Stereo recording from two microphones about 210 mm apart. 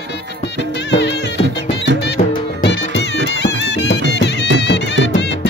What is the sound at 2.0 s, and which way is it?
Music, 55° left (ahead or behind).